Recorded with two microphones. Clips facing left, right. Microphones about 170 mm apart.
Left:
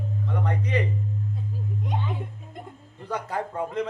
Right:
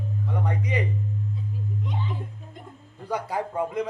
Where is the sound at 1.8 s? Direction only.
60° left (ahead or behind).